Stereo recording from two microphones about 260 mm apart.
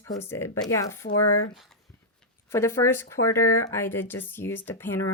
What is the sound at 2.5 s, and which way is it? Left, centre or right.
Speech, centre.